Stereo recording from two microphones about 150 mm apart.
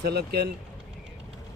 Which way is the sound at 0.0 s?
90° right.